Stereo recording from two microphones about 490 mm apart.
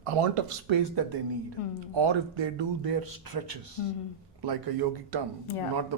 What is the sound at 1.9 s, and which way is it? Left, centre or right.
Speech, right.